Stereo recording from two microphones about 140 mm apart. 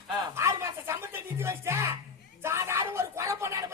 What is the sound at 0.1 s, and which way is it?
Music, 20° right (ahead or behind).